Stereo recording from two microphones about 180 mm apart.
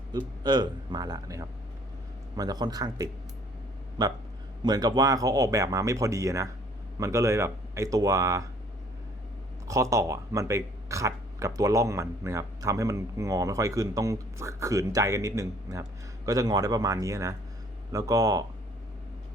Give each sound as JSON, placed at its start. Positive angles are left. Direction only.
{"t": 0.1, "sound": "speech", "side_deg": -25}
{"t": 4.6, "sound": "speech", "side_deg": -20}
{"t": 9.6, "sound": "speech", "side_deg": -15}